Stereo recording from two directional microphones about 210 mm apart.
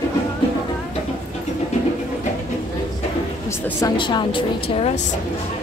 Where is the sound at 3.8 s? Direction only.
20° left (ahead or behind).